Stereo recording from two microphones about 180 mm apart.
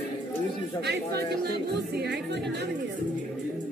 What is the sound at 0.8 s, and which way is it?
Speech, 65° right (ahead or behind).